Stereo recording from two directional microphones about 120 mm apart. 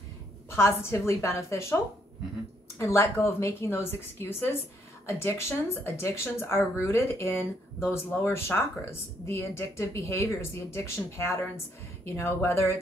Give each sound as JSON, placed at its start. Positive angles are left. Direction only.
{"t": 0.5, "sound": "speech", "side_deg": 20}
{"t": 2.8, "sound": "speech", "side_deg": 25}